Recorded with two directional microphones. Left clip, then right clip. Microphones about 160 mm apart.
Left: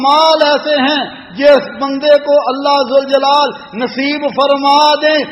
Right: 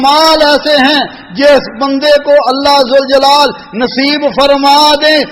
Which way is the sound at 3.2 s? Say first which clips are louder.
Right 4 dB; 30° right (ahead or behind).